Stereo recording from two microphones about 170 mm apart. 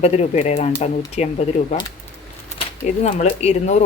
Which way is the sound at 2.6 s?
40° left (ahead or behind).